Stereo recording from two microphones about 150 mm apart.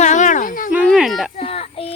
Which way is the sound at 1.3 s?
45° left (ahead or behind).